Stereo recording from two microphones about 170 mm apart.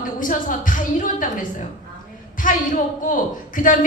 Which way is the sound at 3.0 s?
50° left (ahead or behind).